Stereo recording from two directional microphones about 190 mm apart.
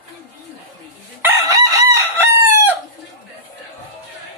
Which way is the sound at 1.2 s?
15° right (ahead or behind).